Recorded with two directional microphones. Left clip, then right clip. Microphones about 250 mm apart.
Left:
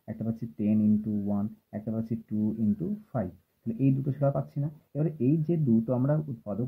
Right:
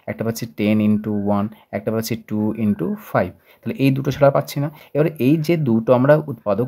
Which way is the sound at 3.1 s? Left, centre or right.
Right.